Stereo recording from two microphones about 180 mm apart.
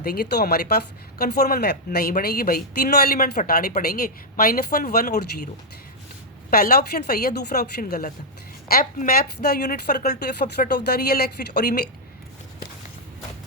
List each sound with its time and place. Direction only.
0.0 s speech: 60° left (ahead or behind)
6.5 s speech: 60° left (ahead or behind)